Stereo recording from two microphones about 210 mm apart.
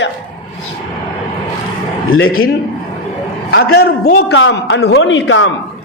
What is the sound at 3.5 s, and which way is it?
Speech, 50° left (ahead or behind).